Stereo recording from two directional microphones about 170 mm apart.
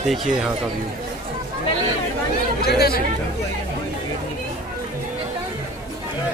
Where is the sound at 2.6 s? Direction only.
65° left (ahead or behind).